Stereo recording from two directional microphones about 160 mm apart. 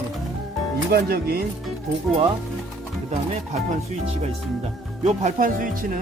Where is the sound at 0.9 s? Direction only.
75° right (ahead or behind).